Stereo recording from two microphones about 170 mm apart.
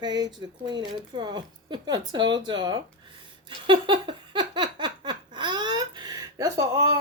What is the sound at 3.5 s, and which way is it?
Giggle, 30° right (ahead or behind).